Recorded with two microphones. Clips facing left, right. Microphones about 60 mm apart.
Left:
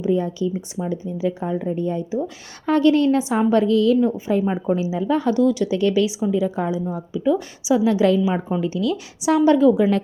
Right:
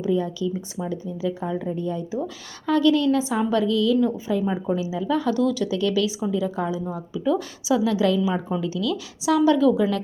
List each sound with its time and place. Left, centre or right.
0.1 s a woman's voice: left